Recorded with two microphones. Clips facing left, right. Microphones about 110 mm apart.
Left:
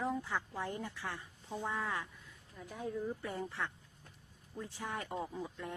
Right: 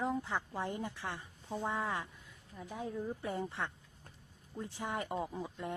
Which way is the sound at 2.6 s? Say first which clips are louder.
Even; centre (ahead or behind).